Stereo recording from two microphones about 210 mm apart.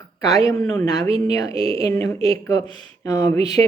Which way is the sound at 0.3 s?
15° left (ahead or behind).